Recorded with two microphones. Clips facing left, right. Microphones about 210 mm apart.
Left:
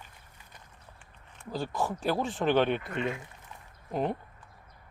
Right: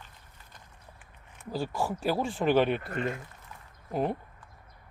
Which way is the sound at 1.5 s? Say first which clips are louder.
Right 1 dB; 10° right (ahead or behind).